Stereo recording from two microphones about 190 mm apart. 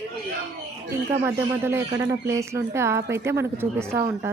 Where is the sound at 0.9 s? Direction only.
15° right (ahead or behind).